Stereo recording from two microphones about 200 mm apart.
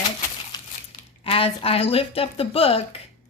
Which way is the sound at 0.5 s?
20° left (ahead or behind).